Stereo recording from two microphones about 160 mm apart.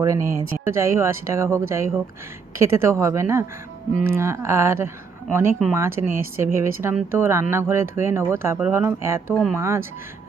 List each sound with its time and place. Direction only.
0.0 s speech: 20° right (ahead or behind)
9.3 s speech: centre (ahead or behind)
9.6 s speech: 15° right (ahead or behind)